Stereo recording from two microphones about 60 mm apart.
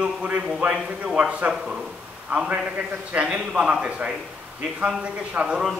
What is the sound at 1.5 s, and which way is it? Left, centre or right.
A man's voice, centre.